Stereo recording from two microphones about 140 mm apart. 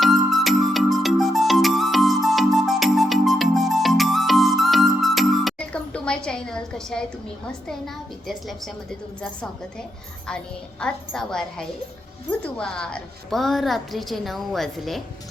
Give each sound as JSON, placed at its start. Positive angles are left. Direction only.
{"t": 0.0, "sound": "music", "side_deg": 0}
{"t": 8.3, "sound": "a woman's voice", "side_deg": 0}
{"t": 10.2, "sound": "a woman's voice", "side_deg": 5}